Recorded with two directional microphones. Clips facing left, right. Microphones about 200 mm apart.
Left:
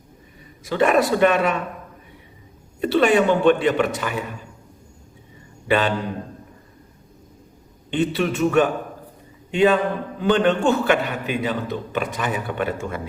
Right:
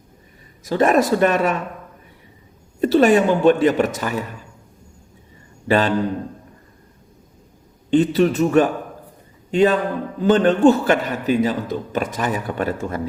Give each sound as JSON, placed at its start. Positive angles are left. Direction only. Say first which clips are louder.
{"t": 0.6, "sound": "a man's voice", "louder": "right 2 dB", "side_deg": -40}
{"t": 2.8, "sound": "a man's voice", "louder": "right 3 dB", "side_deg": -40}
{"t": 5.6, "sound": "a man's voice", "louder": "right 2 dB", "side_deg": -40}
{"t": 7.9, "sound": "a man's voice", "louder": "right 6 dB", "side_deg": -40}